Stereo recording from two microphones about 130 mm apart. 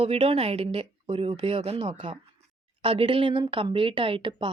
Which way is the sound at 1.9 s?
65° right (ahead or behind).